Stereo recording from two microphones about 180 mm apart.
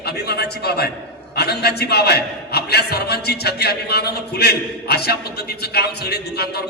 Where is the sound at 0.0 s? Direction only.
60° left (ahead or behind).